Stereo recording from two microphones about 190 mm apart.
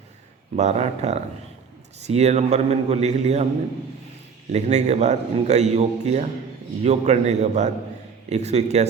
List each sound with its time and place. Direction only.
0.5 s a man's voice: 35° right (ahead or behind)
4.5 s a man's voice: 35° right (ahead or behind)